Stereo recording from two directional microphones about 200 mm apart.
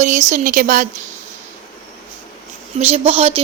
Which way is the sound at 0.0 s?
35° right (ahead or behind).